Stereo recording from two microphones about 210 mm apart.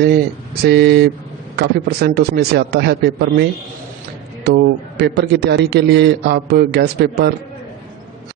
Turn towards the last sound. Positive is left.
turn(degrees=-50)  # may be behind; listen again after turning